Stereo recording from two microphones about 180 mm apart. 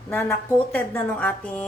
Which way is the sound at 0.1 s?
10° left (ahead or behind).